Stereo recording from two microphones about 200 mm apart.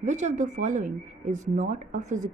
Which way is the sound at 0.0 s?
35° right (ahead or behind).